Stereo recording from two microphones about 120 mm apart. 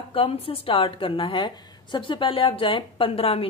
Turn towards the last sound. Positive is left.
turn(degrees=55)  # may be behind; listen again after turning